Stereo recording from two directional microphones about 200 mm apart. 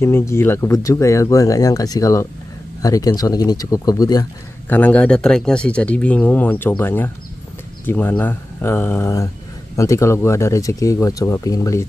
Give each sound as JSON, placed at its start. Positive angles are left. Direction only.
{"t": 0.0, "sound": "speech", "side_deg": 15}